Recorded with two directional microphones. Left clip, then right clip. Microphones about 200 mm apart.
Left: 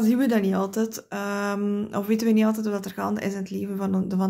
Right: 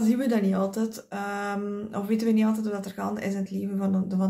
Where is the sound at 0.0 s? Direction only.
45° left (ahead or behind).